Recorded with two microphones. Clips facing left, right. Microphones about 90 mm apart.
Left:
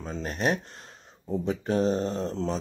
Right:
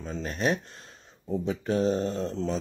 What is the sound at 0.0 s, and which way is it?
Speech, 35° left (ahead or behind).